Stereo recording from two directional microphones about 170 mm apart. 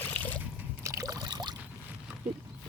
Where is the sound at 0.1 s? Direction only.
10° left (ahead or behind).